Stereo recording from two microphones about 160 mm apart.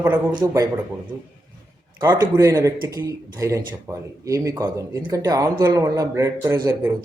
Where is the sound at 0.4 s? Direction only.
20° right (ahead or behind).